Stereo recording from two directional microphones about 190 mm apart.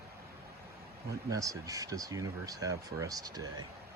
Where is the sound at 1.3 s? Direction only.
20° right (ahead or behind).